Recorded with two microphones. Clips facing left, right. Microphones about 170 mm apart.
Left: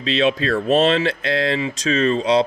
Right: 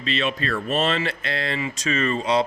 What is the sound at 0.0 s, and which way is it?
Speech, 90° left.